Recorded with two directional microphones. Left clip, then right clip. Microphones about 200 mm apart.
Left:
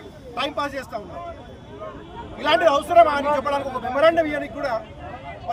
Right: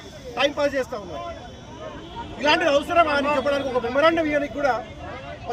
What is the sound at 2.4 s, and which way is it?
A man's voice, 15° left (ahead or behind).